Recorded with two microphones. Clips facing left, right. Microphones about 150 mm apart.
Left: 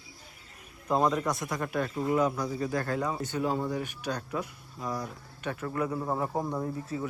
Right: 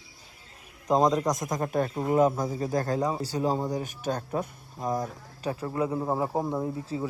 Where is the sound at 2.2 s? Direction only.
45° right (ahead or behind).